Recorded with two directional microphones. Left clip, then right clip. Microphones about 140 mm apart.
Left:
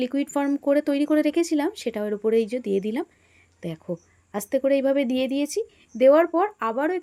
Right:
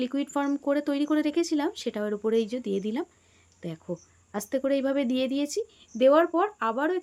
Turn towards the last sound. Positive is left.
turn(degrees=20)  # may be behind; listen again after turning